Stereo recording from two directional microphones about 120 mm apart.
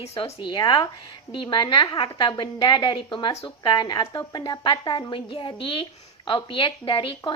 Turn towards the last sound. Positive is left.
turn(degrees=45)  # may be behind; listen again after turning